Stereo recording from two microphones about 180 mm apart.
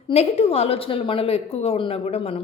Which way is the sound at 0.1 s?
35° left (ahead or behind).